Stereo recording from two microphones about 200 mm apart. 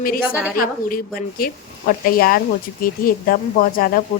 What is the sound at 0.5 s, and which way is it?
Speech, 45° left (ahead or behind).